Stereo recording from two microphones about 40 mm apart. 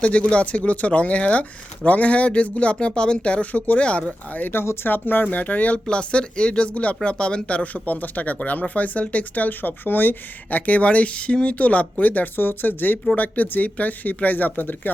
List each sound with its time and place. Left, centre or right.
0.0 s speech: left
3.4 s speech: left
3.8 s speech: left
4.3 s speech: left
4.5 s speech: left
4.9 s speech: left
5.2 s speech: left
5.9 s speech: left
10.7 s speech: left